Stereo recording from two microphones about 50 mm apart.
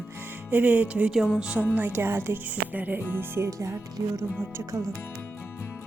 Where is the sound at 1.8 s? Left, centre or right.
Right.